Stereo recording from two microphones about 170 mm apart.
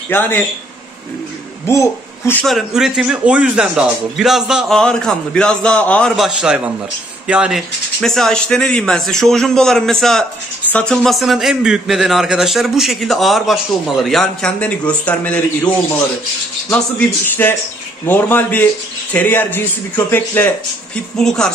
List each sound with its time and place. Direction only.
0.1 s speech: 10° left (ahead or behind)
1.7 s speech: 15° left (ahead or behind)
2.4 s a man's voice: centre (ahead or behind)
16.7 s speech: 10° left (ahead or behind)